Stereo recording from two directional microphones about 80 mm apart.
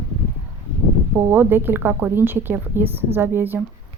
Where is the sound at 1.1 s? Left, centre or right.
Right.